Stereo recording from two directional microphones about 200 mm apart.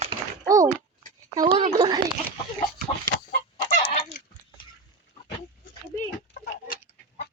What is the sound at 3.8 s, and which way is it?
Goose, 30° left (ahead or behind).